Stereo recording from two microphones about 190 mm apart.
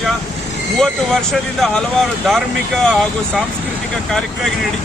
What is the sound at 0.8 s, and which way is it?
Speech, centre (ahead or behind).